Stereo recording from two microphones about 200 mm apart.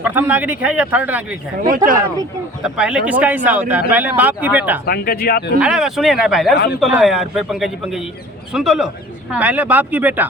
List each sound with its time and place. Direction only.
0.0 s speech: 10° right (ahead or behind)
1.6 s speech: 45° right (ahead or behind)
2.6 s speech: 5° right (ahead or behind)
4.9 s speech: 50° left (ahead or behind)
5.5 s a man's voice: 5° right (ahead or behind)